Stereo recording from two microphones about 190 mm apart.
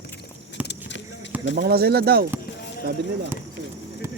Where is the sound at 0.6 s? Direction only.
5° right (ahead or behind).